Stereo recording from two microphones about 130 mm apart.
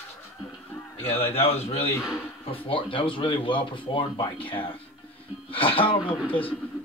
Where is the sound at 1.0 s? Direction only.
50° left (ahead or behind).